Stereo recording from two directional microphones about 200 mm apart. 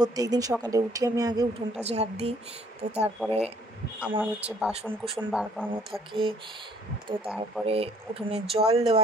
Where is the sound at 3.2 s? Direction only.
5° right (ahead or behind).